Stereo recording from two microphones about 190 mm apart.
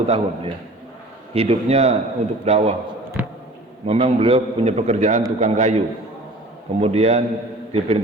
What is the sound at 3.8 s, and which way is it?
A man's voice, 30° right (ahead or behind).